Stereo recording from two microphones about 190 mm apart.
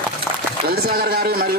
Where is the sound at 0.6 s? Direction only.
55° right (ahead or behind).